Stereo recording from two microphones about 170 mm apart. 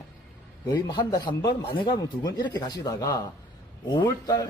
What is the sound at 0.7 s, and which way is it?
Speech, 25° left (ahead or behind).